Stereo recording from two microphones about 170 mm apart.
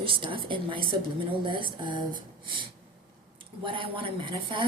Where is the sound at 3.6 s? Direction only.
30° right (ahead or behind).